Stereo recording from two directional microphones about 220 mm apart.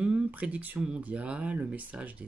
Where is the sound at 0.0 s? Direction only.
5° right (ahead or behind).